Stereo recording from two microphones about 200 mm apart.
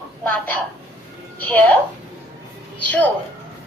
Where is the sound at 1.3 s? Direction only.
10° left (ahead or behind).